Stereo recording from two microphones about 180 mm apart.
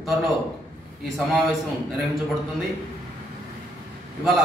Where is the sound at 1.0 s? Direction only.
Centre (ahead or behind).